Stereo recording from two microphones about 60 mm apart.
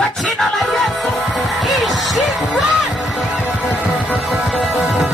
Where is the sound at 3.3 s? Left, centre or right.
Right.